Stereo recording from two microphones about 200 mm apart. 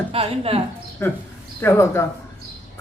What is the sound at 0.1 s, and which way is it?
Speech, 30° right (ahead or behind).